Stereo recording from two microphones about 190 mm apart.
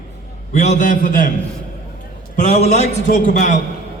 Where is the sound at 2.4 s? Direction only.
40° left (ahead or behind).